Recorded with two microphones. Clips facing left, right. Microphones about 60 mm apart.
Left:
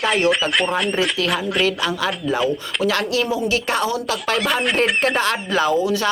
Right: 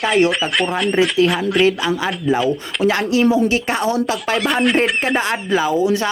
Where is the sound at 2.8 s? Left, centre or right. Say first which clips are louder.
Right 5 dB; right.